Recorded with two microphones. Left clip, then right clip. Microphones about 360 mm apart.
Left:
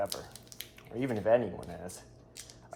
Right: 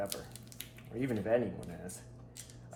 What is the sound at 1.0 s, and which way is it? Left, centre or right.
Speech, centre.